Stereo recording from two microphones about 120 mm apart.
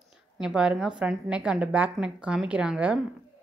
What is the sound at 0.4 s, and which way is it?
A woman's voice, 5° right (ahead or behind).